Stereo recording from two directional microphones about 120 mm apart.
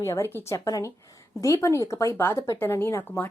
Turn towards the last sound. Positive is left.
turn(degrees=20)  # may be behind; listen again after turning